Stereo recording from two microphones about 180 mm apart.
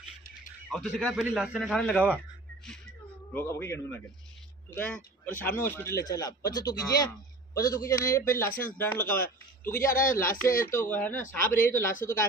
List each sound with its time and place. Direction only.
0.7 s a man's voice: centre (ahead or behind)
3.3 s speech: 15° left (ahead or behind)